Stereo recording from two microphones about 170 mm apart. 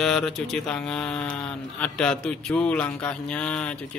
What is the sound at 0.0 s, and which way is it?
Speech, 5° left (ahead or behind).